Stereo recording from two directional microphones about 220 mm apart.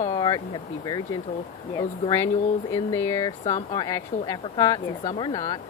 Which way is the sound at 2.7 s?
15° left (ahead or behind).